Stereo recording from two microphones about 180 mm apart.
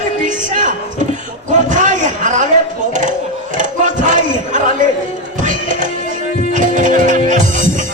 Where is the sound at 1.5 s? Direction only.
45° right (ahead or behind).